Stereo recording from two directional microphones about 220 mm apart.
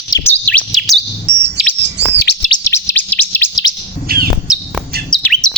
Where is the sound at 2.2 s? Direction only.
45° left (ahead or behind).